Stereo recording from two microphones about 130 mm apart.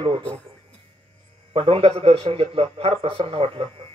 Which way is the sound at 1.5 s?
45° right (ahead or behind).